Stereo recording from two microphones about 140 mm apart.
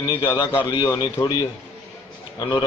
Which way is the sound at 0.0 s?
30° left (ahead or behind).